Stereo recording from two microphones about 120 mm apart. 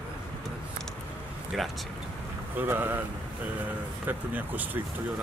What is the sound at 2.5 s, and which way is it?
Speech, 15° right (ahead or behind).